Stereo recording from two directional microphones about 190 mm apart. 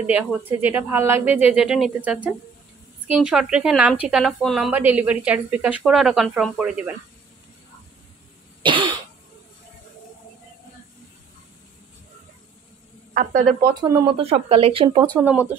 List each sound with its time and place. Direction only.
0.0 s a woman's voice: 5° right (ahead or behind)
8.6 s cough: 25° right (ahead or behind)
13.1 s a woman's voice: 45° right (ahead or behind)
13.7 s speech: 20° right (ahead or behind)
15.1 s speech: 10° right (ahead or behind)